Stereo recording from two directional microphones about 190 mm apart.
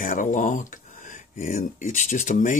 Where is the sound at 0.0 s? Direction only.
45° left (ahead or behind).